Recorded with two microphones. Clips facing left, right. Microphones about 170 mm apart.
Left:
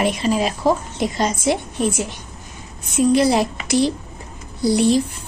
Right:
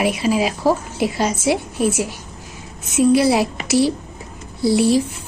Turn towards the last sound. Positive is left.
turn(degrees=-5)  # may be behind; listen again after turning